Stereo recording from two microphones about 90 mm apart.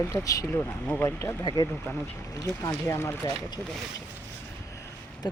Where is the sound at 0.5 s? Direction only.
20° left (ahead or behind).